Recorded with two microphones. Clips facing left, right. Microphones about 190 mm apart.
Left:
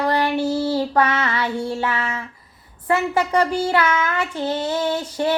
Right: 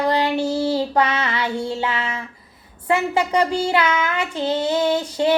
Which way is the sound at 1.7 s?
20° right (ahead or behind).